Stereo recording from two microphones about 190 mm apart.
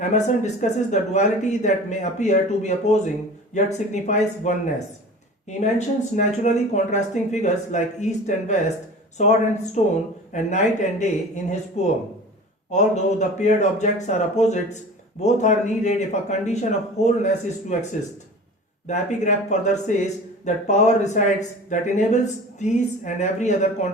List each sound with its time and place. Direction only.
0.0 s speech: 40° left (ahead or behind)
6.1 s speech: 40° left (ahead or behind)
18.9 s speech: 40° left (ahead or behind)